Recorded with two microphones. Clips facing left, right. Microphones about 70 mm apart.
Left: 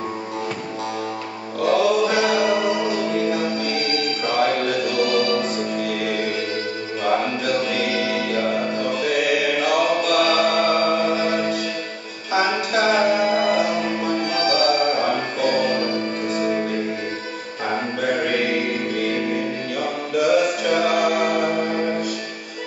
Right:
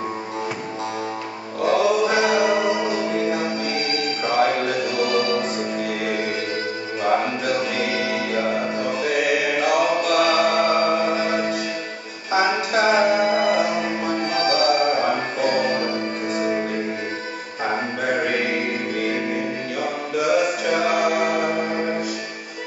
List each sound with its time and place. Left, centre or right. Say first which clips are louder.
1.6 s music: left 1 dB; centre
17.6 s music: left 1 dB; right